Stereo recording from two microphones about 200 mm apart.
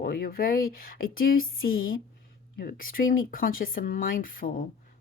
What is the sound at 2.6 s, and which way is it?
A woman's voice, 45° left (ahead or behind).